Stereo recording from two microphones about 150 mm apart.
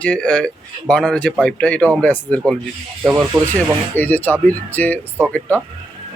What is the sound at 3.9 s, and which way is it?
Speech, 10° left (ahead or behind).